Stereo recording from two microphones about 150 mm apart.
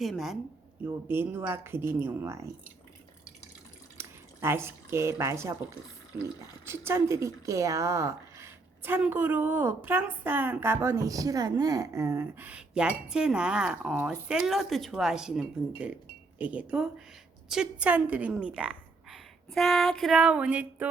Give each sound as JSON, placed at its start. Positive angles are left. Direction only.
{"t": 0.0, "sound": "speech", "side_deg": 0}
{"t": 0.9, "sound": "a woman's voice", "side_deg": -15}
{"t": 3.9, "sound": "speech", "side_deg": -15}
{"t": 6.7, "sound": "a woman's voice", "side_deg": -15}